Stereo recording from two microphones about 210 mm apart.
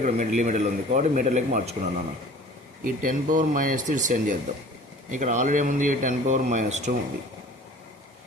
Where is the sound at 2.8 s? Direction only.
40° right (ahead or behind).